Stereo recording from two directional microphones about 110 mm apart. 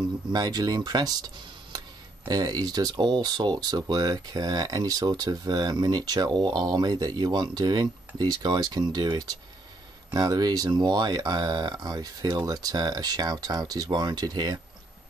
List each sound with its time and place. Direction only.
0.3 s speech: 35° right (ahead or behind)